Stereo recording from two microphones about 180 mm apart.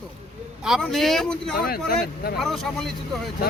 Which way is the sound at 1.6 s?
60° left (ahead or behind).